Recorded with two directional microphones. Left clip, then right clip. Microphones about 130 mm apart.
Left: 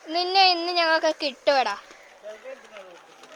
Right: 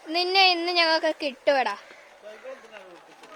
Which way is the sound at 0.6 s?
25° right (ahead or behind).